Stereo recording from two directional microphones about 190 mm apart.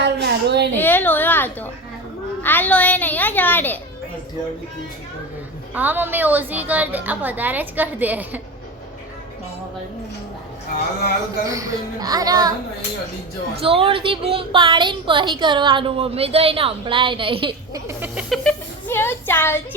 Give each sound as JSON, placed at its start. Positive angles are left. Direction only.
{"t": 0.0, "sound": "a sound", "side_deg": -65}
{"t": 0.8, "sound": "a sound", "side_deg": 10}
{"t": 2.4, "sound": "a child's voice", "side_deg": 10}
{"t": 5.7, "sound": "a woman's voice", "side_deg": -10}
{"t": 11.4, "sound": "speech", "side_deg": -20}
{"t": 13.6, "sound": "speech", "side_deg": -30}
{"t": 17.8, "sound": "chicken", "side_deg": -5}
{"t": 18.4, "sound": "speech", "side_deg": 10}